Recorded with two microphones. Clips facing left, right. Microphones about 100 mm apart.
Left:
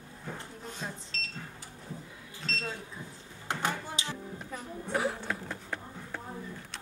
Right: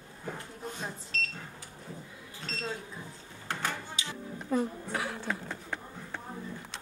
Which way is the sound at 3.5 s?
20° left (ahead or behind).